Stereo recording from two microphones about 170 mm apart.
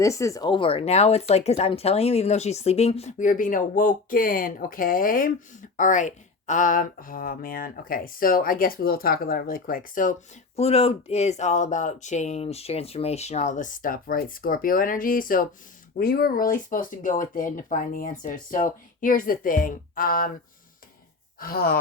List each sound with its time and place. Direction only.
0.0 s speech: 20° left (ahead or behind); by 10.2 s 50° left (ahead or behind)
10.6 s speech: 35° left (ahead or behind); by 20.3 s 55° left (ahead or behind)
21.3 s speech: 60° left (ahead or behind)